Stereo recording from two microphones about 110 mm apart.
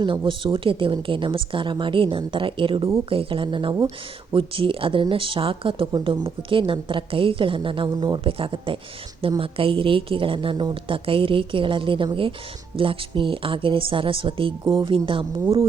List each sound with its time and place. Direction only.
0.3 s speech: 50° right (ahead or behind)